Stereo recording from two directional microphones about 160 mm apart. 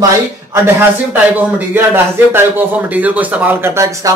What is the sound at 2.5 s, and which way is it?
Speech, 10° right (ahead or behind).